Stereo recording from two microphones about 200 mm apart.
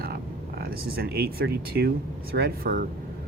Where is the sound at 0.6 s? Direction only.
50° right (ahead or behind).